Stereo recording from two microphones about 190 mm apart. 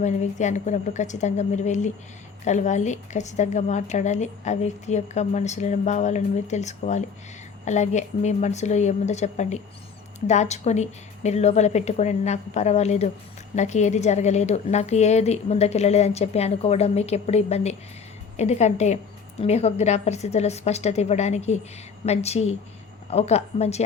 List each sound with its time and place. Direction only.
0.0 s a woman's voice: 40° left (ahead or behind)